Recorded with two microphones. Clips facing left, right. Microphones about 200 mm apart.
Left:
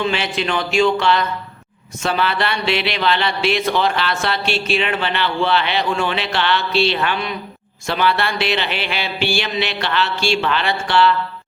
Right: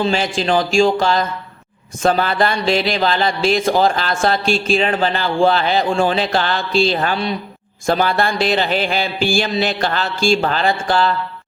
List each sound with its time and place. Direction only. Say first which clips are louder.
0.0 s speech: right 3 dB; 35° right (ahead or behind)
7.9 s a sound: right 3 dB; 45° right (ahead or behind)
9.8 s speech: right 2 dB; 40° right (ahead or behind)